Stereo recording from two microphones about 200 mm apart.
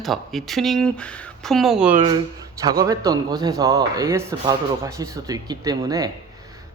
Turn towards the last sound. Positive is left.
turn(degrees=-20)  # may be behind; listen again after turning